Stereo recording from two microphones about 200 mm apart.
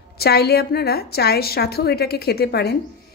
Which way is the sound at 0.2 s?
50° left (ahead or behind).